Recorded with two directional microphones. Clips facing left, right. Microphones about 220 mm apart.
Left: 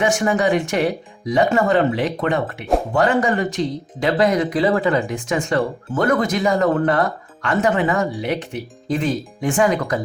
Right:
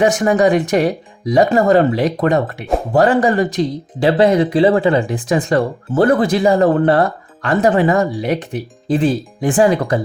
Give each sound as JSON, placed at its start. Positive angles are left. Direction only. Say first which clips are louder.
{"t": 0.0, "sound": "speech", "louder": "right 5 dB", "side_deg": -35}